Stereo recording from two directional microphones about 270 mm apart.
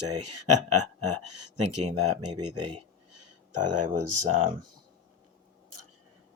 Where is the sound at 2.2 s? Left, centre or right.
Right.